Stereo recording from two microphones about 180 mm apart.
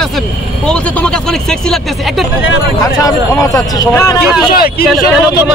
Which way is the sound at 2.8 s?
20° left (ahead or behind).